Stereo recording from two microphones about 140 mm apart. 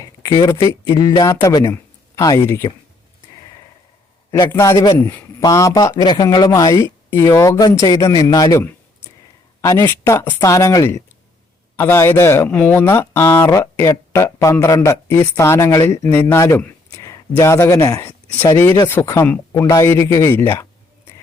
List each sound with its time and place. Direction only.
0.0 s speech: 25° left (ahead or behind)
4.5 s speech: 20° left (ahead or behind)